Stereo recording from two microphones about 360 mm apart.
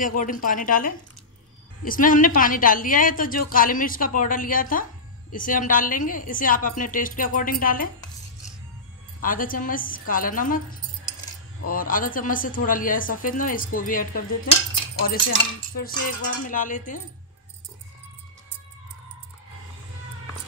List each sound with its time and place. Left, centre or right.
0.0 s a woman's voice: left
9.2 s a woman's voice: left
11.7 s a woman's voice: left
15.0 s cutlery: left
15.9 s a woman's voice: left